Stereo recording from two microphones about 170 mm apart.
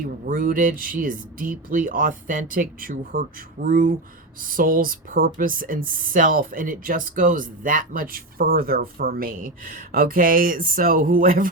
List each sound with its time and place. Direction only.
0.3 s speech: 55° right (ahead or behind)